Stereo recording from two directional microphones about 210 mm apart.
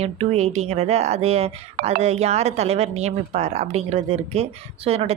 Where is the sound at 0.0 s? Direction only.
30° right (ahead or behind).